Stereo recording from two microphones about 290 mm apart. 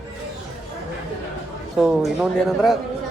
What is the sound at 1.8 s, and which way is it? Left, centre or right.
Speech, centre.